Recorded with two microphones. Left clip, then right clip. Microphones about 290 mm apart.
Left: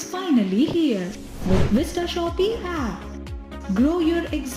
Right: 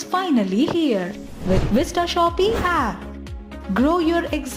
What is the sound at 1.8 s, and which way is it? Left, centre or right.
Speech, right.